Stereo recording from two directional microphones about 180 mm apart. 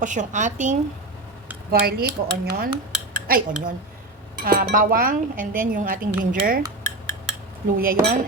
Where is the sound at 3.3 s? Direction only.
55° right (ahead or behind).